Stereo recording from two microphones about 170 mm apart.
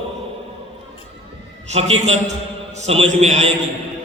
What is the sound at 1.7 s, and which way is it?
A man's voice, 40° right (ahead or behind).